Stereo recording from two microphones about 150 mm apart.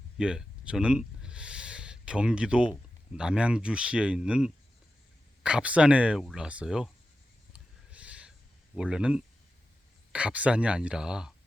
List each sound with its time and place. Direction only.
0.2 s speech: 5° right (ahead or behind)
7.5 s a sound: 10° right (ahead or behind)
8.7 s speech: 5° right (ahead or behind)